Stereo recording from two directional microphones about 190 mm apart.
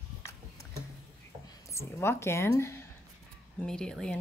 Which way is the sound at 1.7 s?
15° left (ahead or behind).